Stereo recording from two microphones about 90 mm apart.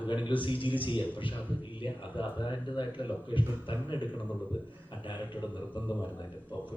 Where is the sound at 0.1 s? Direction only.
60° left (ahead or behind).